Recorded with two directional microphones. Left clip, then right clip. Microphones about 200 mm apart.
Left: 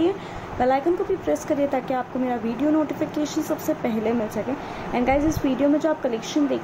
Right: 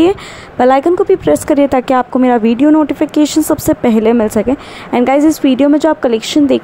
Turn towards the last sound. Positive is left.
turn(degrees=-50)  # may be behind; listen again after turning